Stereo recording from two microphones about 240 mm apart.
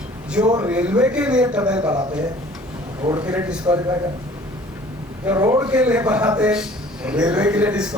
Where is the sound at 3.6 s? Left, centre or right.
Centre.